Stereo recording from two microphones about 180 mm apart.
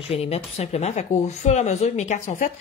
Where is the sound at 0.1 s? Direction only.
35° left (ahead or behind).